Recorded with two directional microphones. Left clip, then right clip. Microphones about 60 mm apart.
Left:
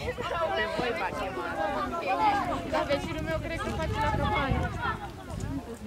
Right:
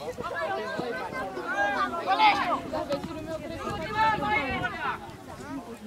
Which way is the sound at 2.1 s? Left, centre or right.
Centre.